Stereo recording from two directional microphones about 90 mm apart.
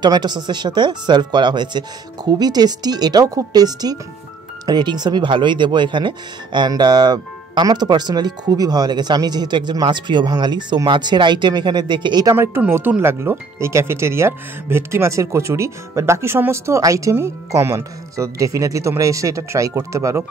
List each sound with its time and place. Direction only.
0.0 s speech: 50° right (ahead or behind)
12.4 s speech: 25° right (ahead or behind)